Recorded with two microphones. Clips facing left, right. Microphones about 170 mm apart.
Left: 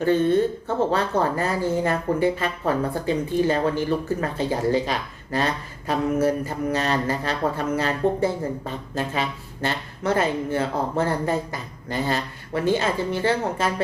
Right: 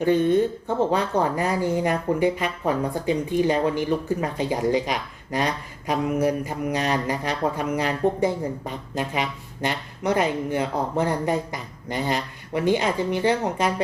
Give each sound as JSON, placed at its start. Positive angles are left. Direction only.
{"t": 0.0, "sound": "speech", "side_deg": -15}